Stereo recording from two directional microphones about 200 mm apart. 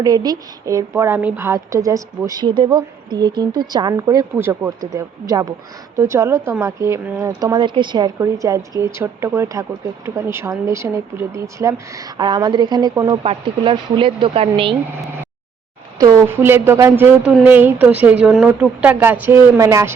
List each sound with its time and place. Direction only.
0.0 s a woman's voice: 20° right (ahead or behind)
16.0 s a woman's voice: 15° right (ahead or behind)